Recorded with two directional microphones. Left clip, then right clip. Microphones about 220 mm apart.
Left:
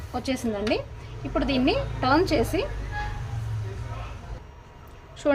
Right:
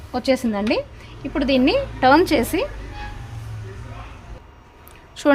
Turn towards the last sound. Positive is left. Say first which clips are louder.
# right 7 dB
turn(degrees=-50)  # may be behind; listen again after turning